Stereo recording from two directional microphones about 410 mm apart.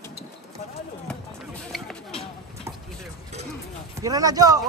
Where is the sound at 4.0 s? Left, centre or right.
Centre.